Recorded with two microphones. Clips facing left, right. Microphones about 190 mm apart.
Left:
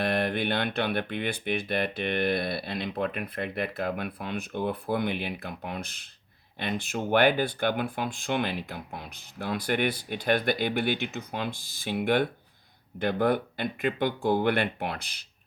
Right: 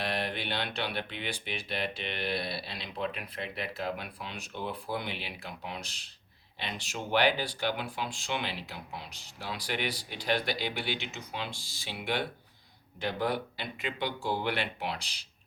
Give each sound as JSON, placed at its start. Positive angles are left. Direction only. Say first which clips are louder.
{"t": 0.0, "sound": "speech", "louder": "left 7 dB", "side_deg": 50}